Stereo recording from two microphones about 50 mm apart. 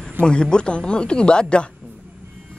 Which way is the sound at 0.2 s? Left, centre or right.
Centre.